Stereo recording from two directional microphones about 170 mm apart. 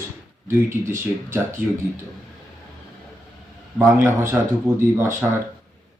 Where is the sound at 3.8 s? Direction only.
15° right (ahead or behind).